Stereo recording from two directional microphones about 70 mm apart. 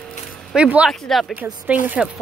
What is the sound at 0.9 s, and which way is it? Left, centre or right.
Speech, centre.